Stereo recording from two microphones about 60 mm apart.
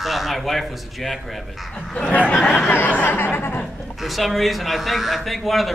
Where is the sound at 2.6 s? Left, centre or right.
Left.